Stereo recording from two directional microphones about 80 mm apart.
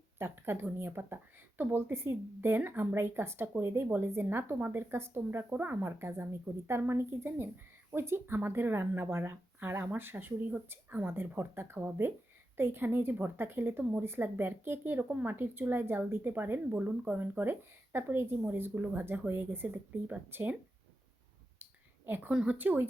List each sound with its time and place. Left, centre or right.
0.2 s a woman's voice: right
21.6 s a sound: right
22.3 s a woman's voice: centre
22.5 s speech: right